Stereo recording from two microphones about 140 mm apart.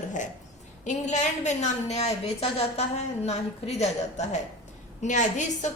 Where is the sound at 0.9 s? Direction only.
55° left (ahead or behind).